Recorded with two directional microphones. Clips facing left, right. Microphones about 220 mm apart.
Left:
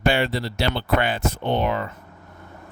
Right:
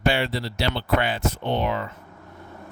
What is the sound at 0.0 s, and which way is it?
Speech, 50° left (ahead or behind).